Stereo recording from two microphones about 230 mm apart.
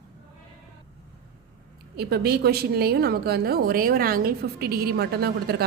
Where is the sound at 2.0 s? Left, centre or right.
Right.